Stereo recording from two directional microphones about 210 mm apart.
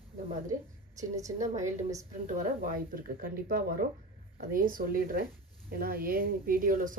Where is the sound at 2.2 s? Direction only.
40° right (ahead or behind).